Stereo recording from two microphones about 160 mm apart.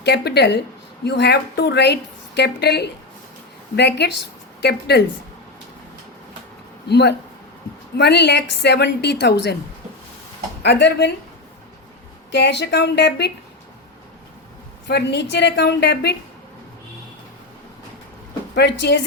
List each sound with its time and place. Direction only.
0.0 s a woman's voice: 90° left
6.8 s a woman's voice: 90° left
10.6 s a woman's voice: 90° left
12.3 s a woman's voice: 90° left
14.8 s a woman's voice: 90° left
18.5 s a woman's voice: 90° left